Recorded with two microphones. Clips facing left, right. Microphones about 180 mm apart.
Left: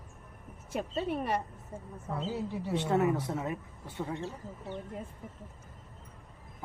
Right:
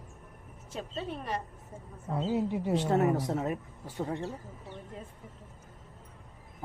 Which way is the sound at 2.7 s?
40° right (ahead or behind).